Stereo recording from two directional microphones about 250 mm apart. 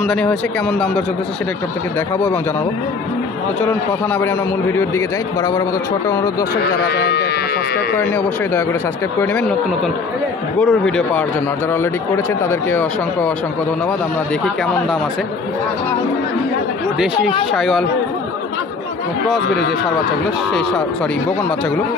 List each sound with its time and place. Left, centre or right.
0.0 s speech: centre
3.6 s speech: centre
6.9 s speech: left
8.0 s speech: centre
10.6 s speech: centre
12.4 s speech: centre
17.6 s speech: centre